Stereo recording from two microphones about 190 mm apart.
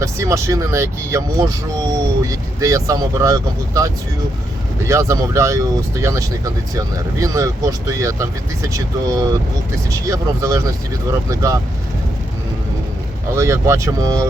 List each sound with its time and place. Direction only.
0.0 s speech: 15° right (ahead or behind)
13.3 s speech: 15° right (ahead or behind)